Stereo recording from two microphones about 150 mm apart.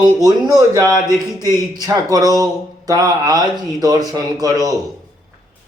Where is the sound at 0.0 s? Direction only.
25° right (ahead or behind).